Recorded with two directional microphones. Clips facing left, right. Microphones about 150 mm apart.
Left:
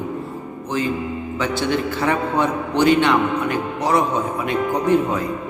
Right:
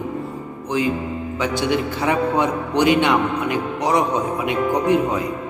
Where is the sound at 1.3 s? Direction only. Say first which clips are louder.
Right 1 dB; 15° right (ahead or behind).